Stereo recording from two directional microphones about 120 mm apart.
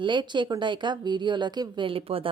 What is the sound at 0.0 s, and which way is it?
A woman's voice, 40° right (ahead or behind).